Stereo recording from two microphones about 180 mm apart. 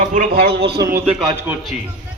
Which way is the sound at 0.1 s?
55° right (ahead or behind).